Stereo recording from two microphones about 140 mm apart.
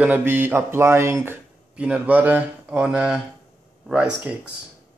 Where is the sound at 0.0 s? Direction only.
15° right (ahead or behind).